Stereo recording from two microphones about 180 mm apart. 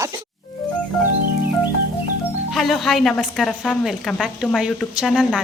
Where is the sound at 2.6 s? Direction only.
Centre (ahead or behind).